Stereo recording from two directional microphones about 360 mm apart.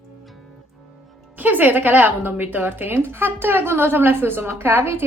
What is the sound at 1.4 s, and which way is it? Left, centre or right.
Speech, centre.